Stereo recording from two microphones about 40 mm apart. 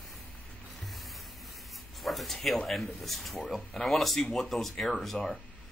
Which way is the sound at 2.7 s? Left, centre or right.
Centre.